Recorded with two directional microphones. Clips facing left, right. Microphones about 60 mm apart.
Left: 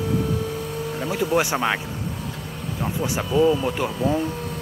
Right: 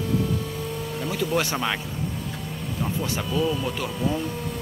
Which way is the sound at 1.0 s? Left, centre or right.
Centre.